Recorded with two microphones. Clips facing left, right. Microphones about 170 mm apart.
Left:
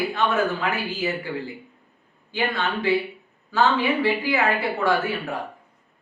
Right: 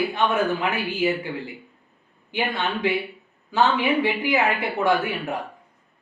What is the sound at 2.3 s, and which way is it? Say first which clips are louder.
A man's voice: even; 20° right (ahead or behind).